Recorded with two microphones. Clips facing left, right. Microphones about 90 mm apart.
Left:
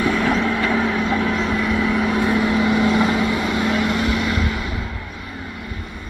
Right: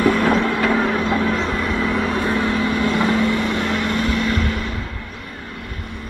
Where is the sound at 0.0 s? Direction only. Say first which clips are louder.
Right 2 dB; 45° right (ahead or behind).